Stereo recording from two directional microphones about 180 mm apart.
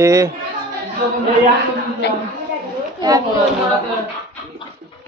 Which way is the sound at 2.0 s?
70° left (ahead or behind).